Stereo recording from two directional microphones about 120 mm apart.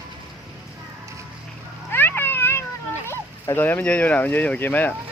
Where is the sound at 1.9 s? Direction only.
15° left (ahead or behind).